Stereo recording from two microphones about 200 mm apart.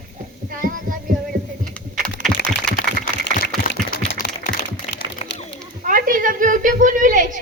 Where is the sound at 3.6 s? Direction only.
55° left (ahead or behind).